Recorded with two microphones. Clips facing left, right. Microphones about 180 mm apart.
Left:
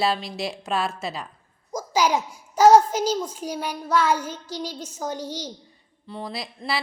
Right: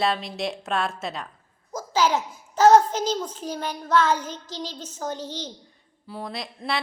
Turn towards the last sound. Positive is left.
turn(degrees=0)  # may be behind; listen again after turning